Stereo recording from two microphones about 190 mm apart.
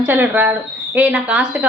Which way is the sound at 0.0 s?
10° right (ahead or behind).